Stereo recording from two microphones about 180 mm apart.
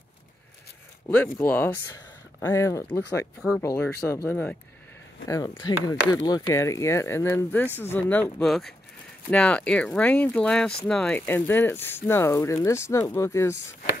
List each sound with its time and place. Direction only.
1.0 s speech: 10° left (ahead or behind)